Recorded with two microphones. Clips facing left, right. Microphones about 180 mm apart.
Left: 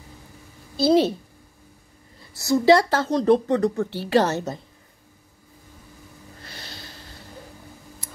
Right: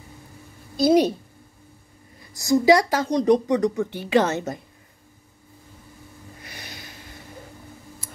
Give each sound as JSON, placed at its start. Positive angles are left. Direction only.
{"t": 0.7, "sound": "speech", "side_deg": -15}
{"t": 2.4, "sound": "speech", "side_deg": -15}
{"t": 6.4, "sound": "a sound", "side_deg": -15}